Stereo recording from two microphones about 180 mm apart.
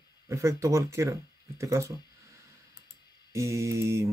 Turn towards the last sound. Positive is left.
turn(degrees=-15)  # may be behind; listen again after turning